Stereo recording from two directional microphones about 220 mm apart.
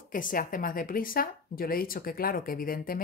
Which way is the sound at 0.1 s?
40° left (ahead or behind).